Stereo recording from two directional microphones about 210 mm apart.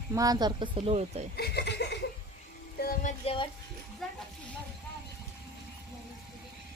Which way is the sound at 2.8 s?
40° left (ahead or behind).